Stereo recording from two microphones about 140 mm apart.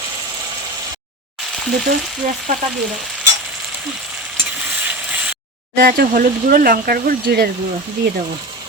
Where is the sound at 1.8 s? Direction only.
70° right (ahead or behind).